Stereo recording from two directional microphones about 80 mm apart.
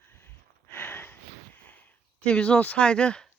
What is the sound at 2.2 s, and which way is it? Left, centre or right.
Speech, centre.